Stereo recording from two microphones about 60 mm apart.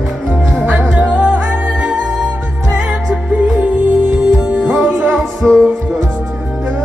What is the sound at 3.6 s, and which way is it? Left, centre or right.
Music, right.